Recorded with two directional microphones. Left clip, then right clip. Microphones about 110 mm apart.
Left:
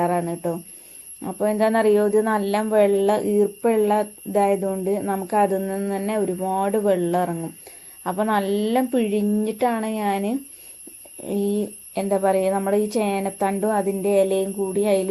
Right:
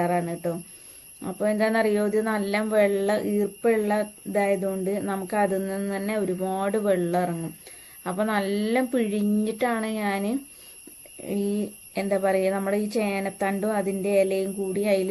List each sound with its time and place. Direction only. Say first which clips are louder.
0.0 s a woman's voice: left 3 dB; 25° left (ahead or behind)
8.8 s speech: left 3 dB; 15° left (ahead or behind)
9.0 s a woman's voice: left 4 dB; 25° left (ahead or behind)